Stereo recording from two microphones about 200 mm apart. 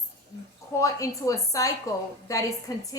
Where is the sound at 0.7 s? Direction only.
15° left (ahead or behind).